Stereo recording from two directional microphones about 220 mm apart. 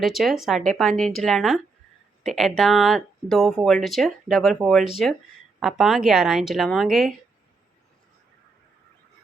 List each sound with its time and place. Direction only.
0.0 s speech: centre (ahead or behind)